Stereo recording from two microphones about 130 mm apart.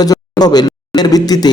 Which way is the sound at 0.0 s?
30° left (ahead or behind).